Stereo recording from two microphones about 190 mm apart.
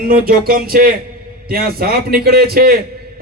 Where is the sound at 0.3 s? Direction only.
50° right (ahead or behind).